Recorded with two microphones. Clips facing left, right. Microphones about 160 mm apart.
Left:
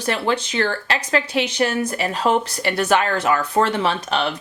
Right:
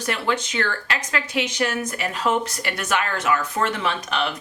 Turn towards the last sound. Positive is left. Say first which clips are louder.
# left 4 dB
turn(degrees=30)  # may be behind; listen again after turning